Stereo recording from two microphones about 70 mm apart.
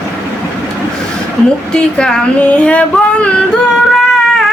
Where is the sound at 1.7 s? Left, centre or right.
Centre.